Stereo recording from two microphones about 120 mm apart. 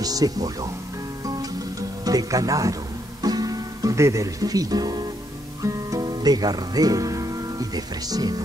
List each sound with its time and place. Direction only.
0.0 s speech: 30° right (ahead or behind)
1.2 s music: 30° right (ahead or behind)
5.6 s speech: 30° right (ahead or behind)